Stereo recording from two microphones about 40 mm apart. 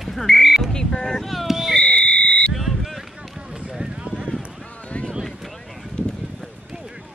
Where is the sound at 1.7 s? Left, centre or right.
Centre.